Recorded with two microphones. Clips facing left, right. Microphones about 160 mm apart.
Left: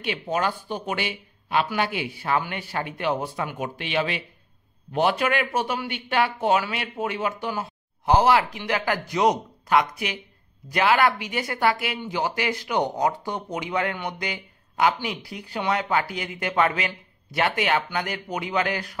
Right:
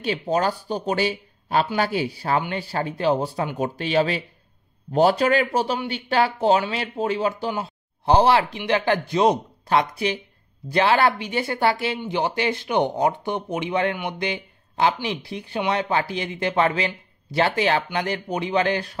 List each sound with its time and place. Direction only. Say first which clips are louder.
0.0 s speech: right 4 dB; 35° right (ahead or behind)